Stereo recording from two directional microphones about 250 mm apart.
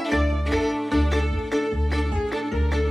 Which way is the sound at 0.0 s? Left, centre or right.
Centre.